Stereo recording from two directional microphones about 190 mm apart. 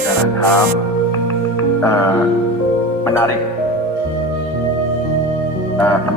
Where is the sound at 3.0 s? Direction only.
15° left (ahead or behind).